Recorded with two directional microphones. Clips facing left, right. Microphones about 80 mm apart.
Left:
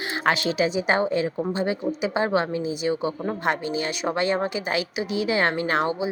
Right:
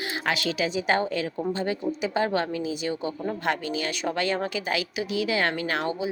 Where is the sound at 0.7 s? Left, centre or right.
Centre.